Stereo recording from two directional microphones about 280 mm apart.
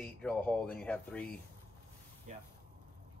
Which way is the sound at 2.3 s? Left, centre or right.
Right.